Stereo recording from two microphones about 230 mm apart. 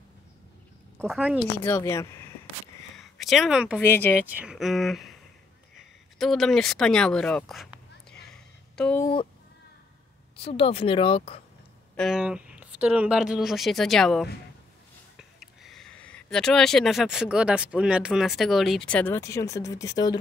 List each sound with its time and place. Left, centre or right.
0.9 s speech: centre
1.6 s speech: centre
3.0 s speech: centre
3.8 s speech: centre
4.3 s speech: centre
6.1 s a sound: centre
9.0 s speech: left
10.4 s speech: left
12.0 s speech: centre